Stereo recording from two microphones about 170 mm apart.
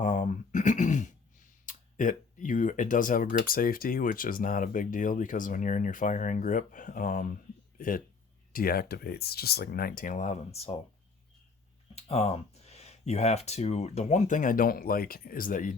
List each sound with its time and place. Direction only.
0.0 s throat clearing: 45° left (ahead or behind)
1.6 s speech: 50° left (ahead or behind)
11.9 s speech: 40° left (ahead or behind); by 15.7 s 55° left (ahead or behind)